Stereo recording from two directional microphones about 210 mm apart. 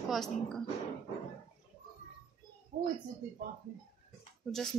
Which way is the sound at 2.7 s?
40° right (ahead or behind).